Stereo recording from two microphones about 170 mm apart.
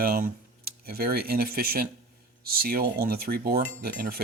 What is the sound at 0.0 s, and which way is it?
Speech, 60° right (ahead or behind).